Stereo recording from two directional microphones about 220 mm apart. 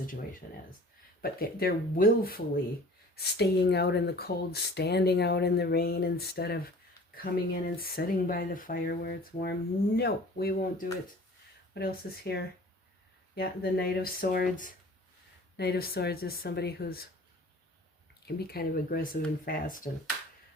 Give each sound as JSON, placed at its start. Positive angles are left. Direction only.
{"t": 0.4, "sound": "speech", "side_deg": 40}
{"t": 18.3, "sound": "speech", "side_deg": 45}